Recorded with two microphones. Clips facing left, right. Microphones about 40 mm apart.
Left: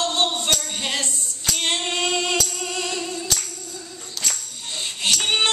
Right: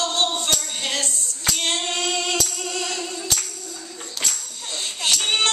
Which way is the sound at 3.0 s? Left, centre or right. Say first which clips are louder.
Left 1 dB; centre.